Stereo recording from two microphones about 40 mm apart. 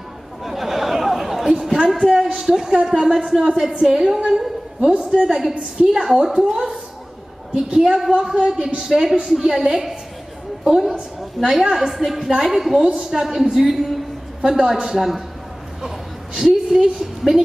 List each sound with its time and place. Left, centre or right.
0.4 s a sound: centre
2.3 s a woman's voice: centre
3.3 s speech: centre
5.5 s a woman's voice: right
5.9 s speech: centre
11.1 s a woman's voice: centre
16.3 s a woman's voice: centre